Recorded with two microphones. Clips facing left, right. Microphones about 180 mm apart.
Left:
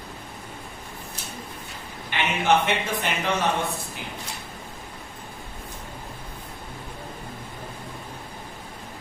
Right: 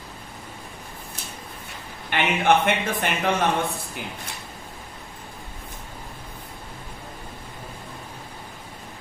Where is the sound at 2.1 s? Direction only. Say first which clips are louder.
Right 3 dB; 55° right (ahead or behind).